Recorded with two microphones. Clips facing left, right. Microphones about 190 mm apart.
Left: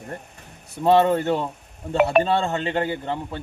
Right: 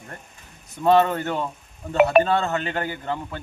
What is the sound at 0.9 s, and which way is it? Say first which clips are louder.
Speech: left 1 dB; 30° left (ahead or behind).